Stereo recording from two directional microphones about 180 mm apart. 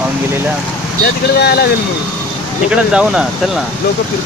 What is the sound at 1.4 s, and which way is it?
Speech, 60° left (ahead or behind).